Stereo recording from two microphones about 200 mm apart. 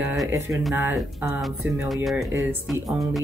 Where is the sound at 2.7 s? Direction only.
Centre (ahead or behind).